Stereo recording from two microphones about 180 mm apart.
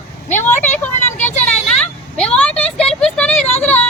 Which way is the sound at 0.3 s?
10° left (ahead or behind).